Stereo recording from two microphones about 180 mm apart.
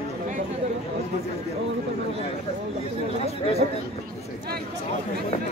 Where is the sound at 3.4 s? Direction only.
35° left (ahead or behind).